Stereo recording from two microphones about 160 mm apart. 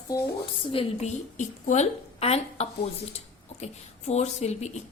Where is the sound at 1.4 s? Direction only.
50° left (ahead or behind).